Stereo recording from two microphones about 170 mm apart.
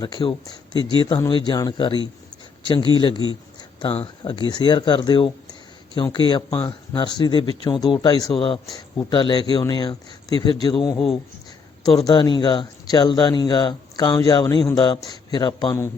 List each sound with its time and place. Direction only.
0.0 s speech: 25° left (ahead or behind)
10.9 s speech: centre (ahead or behind)
11.9 s speech: 25° left (ahead or behind)